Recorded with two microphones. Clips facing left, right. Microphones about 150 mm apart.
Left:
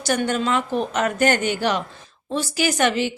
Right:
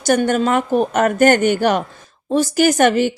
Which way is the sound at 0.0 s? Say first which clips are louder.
Right 6 dB; 45° right (ahead or behind).